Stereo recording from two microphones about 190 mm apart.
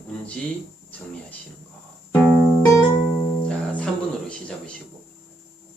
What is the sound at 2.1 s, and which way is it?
Music, 10° left (ahead or behind).